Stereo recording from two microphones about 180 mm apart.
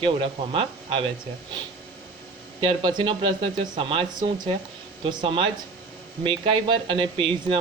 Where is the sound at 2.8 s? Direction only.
25° right (ahead or behind).